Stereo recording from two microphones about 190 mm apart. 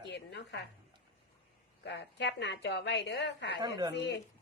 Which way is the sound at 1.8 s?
65° left (ahead or behind).